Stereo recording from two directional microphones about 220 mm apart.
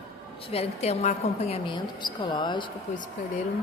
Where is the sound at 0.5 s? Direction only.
30° left (ahead or behind).